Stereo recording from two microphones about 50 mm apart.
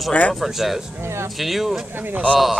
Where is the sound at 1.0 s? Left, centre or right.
Right.